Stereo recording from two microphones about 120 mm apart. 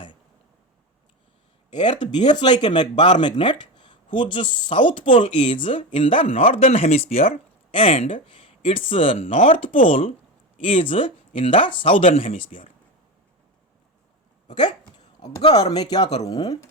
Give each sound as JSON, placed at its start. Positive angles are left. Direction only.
{"t": 2.0, "sound": "speech", "side_deg": 40}
{"t": 15.2, "sound": "speech", "side_deg": 35}